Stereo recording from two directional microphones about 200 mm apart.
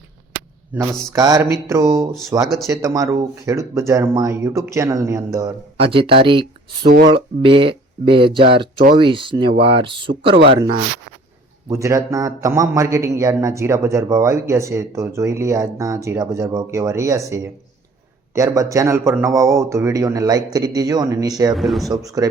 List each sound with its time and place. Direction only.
0.7 s a man's voice: 15° right (ahead or behind)
5.7 s speech: 25° right (ahead or behind)
6.8 s speech: 50° right (ahead or behind)
7.1 s a man's voice: 25° right (ahead or behind)
21.5 s speech: centre (ahead or behind)
22.0 s a man's voice: 15° right (ahead or behind)